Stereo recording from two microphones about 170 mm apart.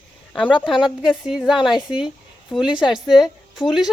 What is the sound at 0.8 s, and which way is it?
Speech, centre (ahead or behind).